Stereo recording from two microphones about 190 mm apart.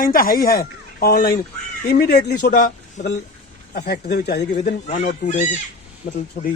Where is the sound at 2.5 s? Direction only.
40° left (ahead or behind).